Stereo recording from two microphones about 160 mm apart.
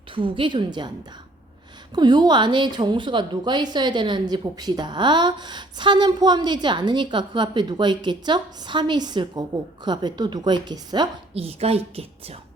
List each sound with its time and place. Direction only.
0.1 s a woman's voice: 30° right (ahead or behind)
2.0 s a woman's voice: 25° right (ahead or behind)
11.4 s a woman's voice: 40° right (ahead or behind)